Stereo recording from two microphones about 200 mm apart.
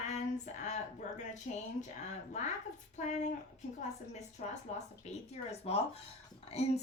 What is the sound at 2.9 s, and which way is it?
Speech, 35° left (ahead or behind).